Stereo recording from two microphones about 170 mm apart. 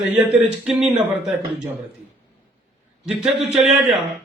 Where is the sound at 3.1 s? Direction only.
5° right (ahead or behind).